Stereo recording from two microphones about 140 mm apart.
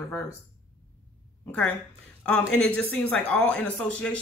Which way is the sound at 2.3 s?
5° left (ahead or behind).